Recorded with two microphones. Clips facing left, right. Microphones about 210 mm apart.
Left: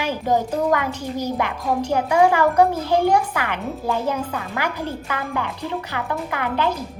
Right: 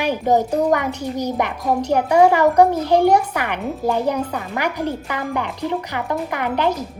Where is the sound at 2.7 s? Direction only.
15° right (ahead or behind).